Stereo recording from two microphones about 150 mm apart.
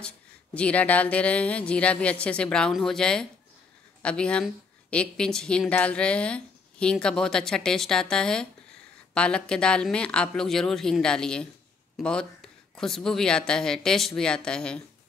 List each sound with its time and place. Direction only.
0.6 s speech: 10° left (ahead or behind)